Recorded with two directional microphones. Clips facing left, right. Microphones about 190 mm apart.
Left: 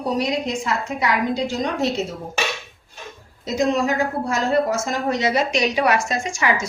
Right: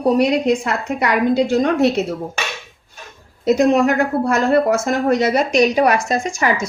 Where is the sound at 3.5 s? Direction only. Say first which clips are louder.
Right 6 dB; 60° right (ahead or behind); by 6.5 s 40° right (ahead or behind).